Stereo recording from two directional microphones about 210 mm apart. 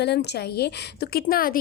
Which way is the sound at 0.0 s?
55° left (ahead or behind).